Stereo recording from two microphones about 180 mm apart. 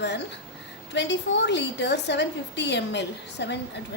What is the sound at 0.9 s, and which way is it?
A woman's voice, 75° left (ahead or behind).